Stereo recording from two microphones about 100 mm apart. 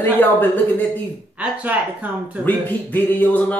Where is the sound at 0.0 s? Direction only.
20° left (ahead or behind).